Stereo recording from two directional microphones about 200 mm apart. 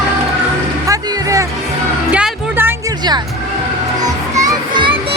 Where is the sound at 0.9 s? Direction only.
15° right (ahead or behind).